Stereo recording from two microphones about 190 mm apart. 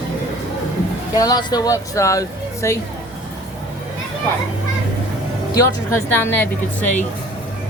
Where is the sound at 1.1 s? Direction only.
20° left (ahead or behind).